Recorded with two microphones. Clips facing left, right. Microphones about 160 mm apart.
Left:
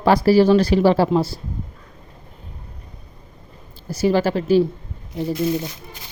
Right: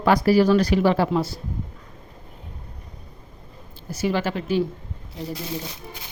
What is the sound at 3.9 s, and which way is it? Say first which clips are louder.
Speech: left 6 dB; 35° left (ahead or behind).